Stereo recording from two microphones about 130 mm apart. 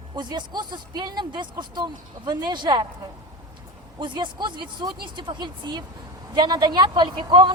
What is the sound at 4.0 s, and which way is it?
A man's voice, 35° right (ahead or behind).